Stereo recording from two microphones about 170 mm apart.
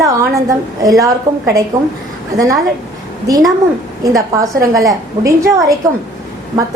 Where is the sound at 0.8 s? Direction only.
20° right (ahead or behind).